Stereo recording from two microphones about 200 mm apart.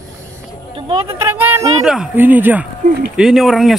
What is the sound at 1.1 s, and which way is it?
Speech, 10° right (ahead or behind).